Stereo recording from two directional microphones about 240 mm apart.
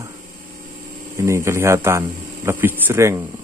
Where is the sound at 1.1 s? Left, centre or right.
Centre.